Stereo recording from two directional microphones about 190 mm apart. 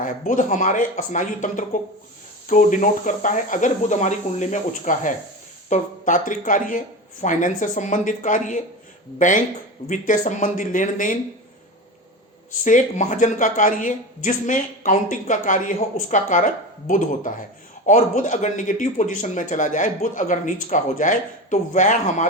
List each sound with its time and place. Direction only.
0.0 s speech: 45° left (ahead or behind)
12.6 s speech: 40° left (ahead or behind)